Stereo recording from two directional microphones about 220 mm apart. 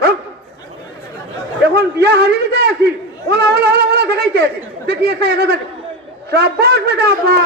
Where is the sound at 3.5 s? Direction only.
45° right (ahead or behind).